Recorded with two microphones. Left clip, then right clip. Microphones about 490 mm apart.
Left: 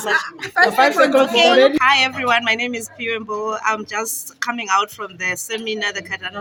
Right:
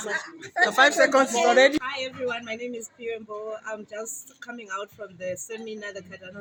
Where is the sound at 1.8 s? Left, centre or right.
Right.